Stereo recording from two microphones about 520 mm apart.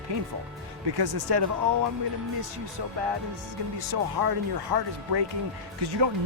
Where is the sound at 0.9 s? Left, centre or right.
Right.